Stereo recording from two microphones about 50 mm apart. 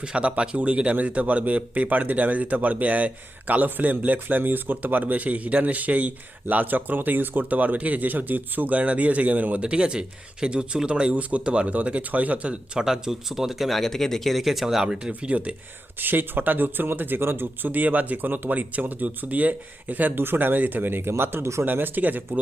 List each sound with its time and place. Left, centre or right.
0.0 s speech: right
9.6 s speech: centre
12.8 s speech: centre
15.3 s speech: right
16.0 s speech: right
21.1 s speech: right
21.6 s speech: right